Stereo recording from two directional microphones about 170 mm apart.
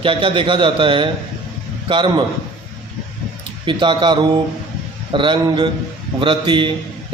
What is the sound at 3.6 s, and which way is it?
A man's voice, 30° right (ahead or behind).